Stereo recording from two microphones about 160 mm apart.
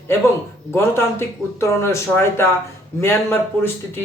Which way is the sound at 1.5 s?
15° left (ahead or behind).